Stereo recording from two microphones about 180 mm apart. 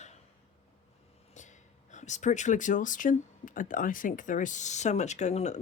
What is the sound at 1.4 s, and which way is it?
Speech, 40° left (ahead or behind).